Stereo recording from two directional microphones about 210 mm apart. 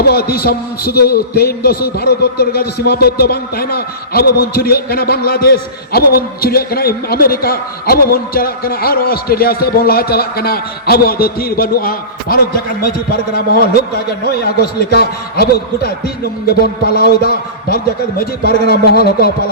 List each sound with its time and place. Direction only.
0.0 s a man's voice: 45° left (ahead or behind)